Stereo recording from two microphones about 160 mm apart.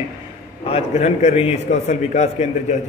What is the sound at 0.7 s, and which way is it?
A man's voice, 40° left (ahead or behind).